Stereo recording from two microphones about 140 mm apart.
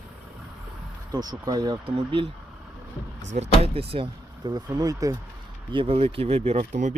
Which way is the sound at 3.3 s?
50° right (ahead or behind).